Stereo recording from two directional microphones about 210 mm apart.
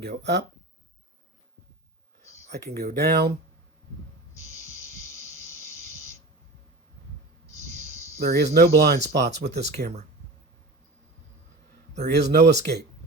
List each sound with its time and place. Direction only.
0.0 s speech: 50° right (ahead or behind)
2.6 s speech: 50° right (ahead or behind)
4.4 s music: 15° left (ahead or behind)
8.2 s speech: 50° right (ahead or behind)
12.0 s speech: 50° right (ahead or behind)